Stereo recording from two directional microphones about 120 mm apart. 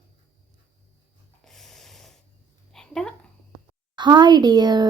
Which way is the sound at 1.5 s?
Centre (ahead or behind).